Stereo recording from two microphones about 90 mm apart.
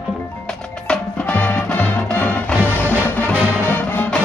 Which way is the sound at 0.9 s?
15° left (ahead or behind).